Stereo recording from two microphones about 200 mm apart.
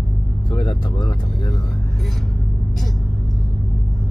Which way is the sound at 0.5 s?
20° left (ahead or behind).